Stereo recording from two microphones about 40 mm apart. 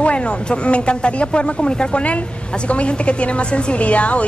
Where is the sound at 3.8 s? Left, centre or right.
Left.